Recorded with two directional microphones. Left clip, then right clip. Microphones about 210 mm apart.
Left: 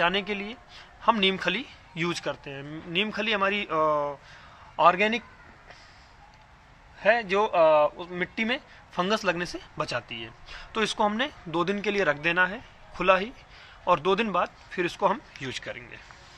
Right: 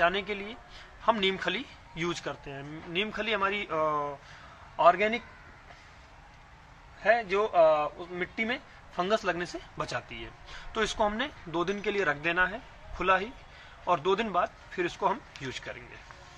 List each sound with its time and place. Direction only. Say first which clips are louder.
0.0 s speech: left 2 dB; 45° left (ahead or behind)
7.0 s speech: left 3 dB; 50° left (ahead or behind)